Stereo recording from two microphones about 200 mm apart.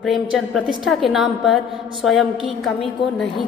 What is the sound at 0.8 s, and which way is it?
A woman's voice, centre (ahead or behind).